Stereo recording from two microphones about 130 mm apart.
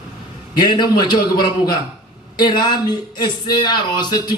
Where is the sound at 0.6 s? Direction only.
35° left (ahead or behind).